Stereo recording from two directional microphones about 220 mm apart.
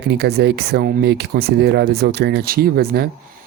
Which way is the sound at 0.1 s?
45° right (ahead or behind).